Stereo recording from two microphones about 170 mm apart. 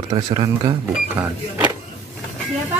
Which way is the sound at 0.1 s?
25° right (ahead or behind).